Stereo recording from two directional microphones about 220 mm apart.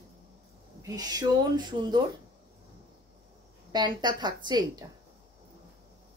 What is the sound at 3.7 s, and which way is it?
A woman's voice, 20° right (ahead or behind).